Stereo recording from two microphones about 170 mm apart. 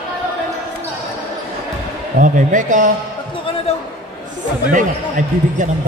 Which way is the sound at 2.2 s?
50° right (ahead or behind).